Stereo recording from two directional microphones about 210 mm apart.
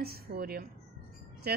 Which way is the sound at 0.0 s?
45° right (ahead or behind).